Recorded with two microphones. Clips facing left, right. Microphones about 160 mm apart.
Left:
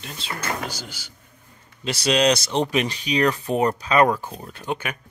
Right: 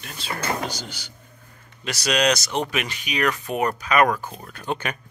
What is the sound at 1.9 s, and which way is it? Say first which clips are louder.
Speech: left 2 dB; 30° left (ahead or behind).